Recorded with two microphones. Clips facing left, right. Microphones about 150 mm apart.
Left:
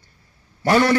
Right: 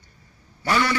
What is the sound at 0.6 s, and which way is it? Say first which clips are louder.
Speech: left 6 dB; 45° left (ahead or behind).